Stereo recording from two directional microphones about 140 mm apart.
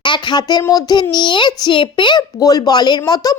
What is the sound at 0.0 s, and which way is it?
A woman's voice, 35° left (ahead or behind).